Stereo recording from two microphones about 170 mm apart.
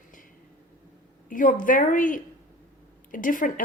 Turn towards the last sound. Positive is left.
turn(degrees=55)  # may be behind; listen again after turning